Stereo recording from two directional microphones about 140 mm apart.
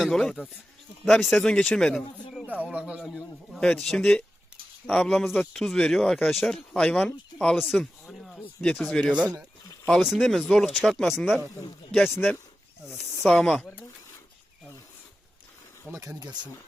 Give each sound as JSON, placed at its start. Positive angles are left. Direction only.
{"t": 0.0, "sound": "speech", "side_deg": 0}
{"t": 2.5, "sound": "speech", "side_deg": -10}
{"t": 3.5, "sound": "speech", "side_deg": 5}
{"t": 15.9, "sound": "speech", "side_deg": -25}